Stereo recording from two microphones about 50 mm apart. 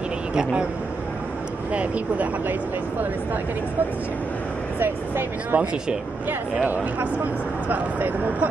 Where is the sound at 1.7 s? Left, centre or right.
Right.